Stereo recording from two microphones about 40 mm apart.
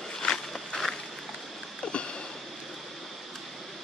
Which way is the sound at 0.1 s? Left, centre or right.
Centre.